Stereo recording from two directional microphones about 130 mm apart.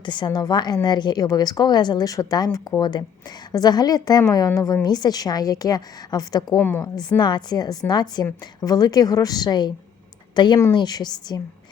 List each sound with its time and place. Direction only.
0.0 s a woman's voice: 35° left (ahead or behind)
6.6 s a woman's voice: 15° left (ahead or behind)
6.8 s a woman's voice: 30° left (ahead or behind)